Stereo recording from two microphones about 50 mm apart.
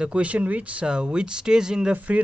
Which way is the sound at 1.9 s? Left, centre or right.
Right.